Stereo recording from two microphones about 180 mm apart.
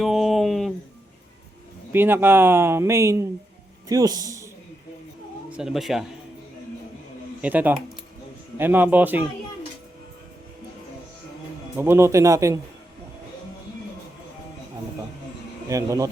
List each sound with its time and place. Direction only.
0.0 s dog: centre (ahead or behind)
1.9 s speech: 10° right (ahead or behind)
5.5 s speech: 5° right (ahead or behind)
7.4 s speech: 10° right (ahead or behind)
11.8 s speech: 15° right (ahead or behind)
15.7 s speech: 15° right (ahead or behind)